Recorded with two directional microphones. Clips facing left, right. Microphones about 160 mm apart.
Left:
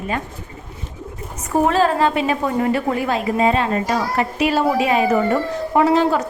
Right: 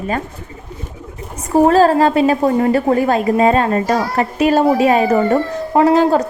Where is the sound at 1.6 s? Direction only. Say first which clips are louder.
Right 6 dB; 40° right (ahead or behind).